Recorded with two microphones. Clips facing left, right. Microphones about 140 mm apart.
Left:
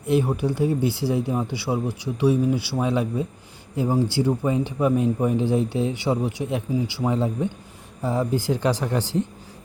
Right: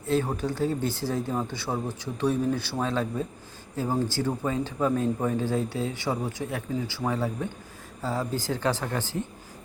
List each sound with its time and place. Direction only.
0.0 s a man's voice: 15° left (ahead or behind)